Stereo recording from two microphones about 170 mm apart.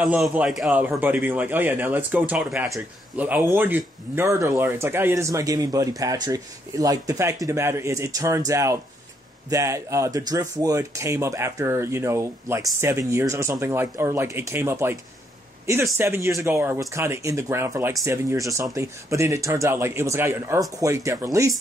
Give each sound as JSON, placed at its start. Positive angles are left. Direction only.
{"t": 0.0, "sound": "speech", "side_deg": -5}